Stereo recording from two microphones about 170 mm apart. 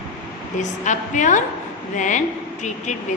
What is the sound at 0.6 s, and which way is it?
A woman's voice, 45° left (ahead or behind).